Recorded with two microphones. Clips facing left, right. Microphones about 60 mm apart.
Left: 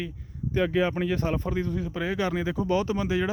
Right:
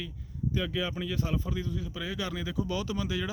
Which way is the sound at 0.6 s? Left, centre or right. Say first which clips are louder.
Left 9 dB; left.